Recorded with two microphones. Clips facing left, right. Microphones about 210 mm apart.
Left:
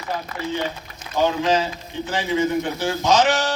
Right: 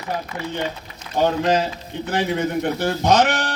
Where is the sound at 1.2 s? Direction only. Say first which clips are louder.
Right 1 dB; 60° right (ahead or behind).